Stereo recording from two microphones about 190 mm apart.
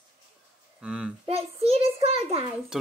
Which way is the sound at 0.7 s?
5° right (ahead or behind).